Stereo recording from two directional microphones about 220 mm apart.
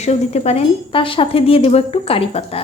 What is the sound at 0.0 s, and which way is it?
Speech, 30° left (ahead or behind).